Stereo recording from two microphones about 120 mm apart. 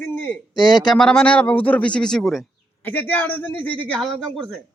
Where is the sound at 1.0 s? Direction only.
5° left (ahead or behind).